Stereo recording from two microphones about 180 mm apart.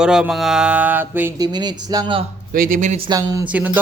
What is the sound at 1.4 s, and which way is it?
Speech, 25° right (ahead or behind).